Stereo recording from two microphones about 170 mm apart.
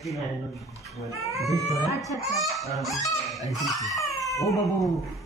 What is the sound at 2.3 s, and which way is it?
Speech, centre (ahead or behind).